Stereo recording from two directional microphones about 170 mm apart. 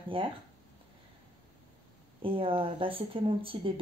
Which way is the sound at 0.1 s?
30° right (ahead or behind).